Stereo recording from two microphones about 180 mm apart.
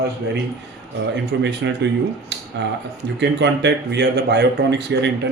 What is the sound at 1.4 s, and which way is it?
A man's voice, 75° right (ahead or behind).